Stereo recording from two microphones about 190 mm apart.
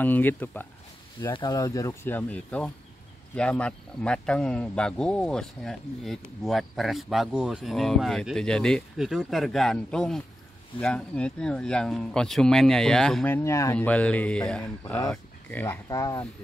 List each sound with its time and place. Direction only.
0.0 s speech: 10° left (ahead or behind)
1.3 s speech: 20° left (ahead or behind)